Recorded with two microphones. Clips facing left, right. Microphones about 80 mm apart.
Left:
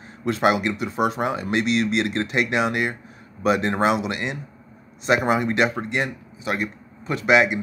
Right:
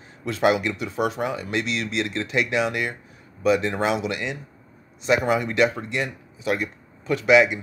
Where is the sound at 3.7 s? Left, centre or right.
Left.